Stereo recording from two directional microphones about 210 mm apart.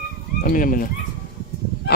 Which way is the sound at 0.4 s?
40° left (ahead or behind).